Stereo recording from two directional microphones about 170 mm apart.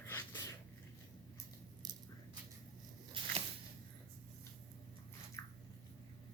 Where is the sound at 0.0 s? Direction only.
15° left (ahead or behind).